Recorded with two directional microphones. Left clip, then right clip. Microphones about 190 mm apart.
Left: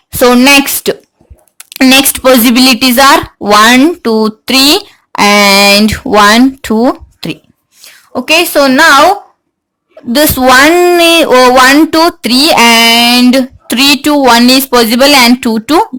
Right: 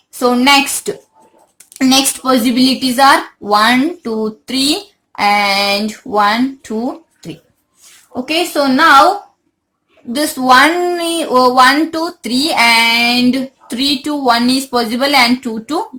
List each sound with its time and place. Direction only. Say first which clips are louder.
0.2 s a woman's voice: left 6 dB; 45° left (ahead or behind)
2.6 s a woman's voice: left 6 dB; 45° left (ahead or behind)
10.1 s a woman's voice: left 5 dB; 45° left (ahead or behind)